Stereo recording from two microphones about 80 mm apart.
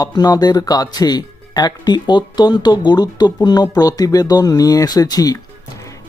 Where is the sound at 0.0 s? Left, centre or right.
Left.